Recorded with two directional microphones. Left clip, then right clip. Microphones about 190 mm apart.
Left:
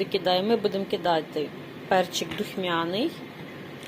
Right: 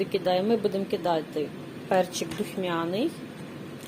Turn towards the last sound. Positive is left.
turn(degrees=-15)  # may be behind; listen again after turning